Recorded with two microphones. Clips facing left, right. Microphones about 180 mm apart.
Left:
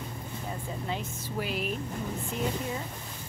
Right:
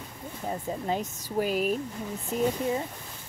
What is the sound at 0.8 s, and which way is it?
Speech, 40° right (ahead or behind).